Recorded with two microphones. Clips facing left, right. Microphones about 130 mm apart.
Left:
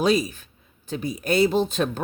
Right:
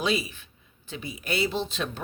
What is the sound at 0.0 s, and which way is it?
Speech, 40° left (ahead or behind).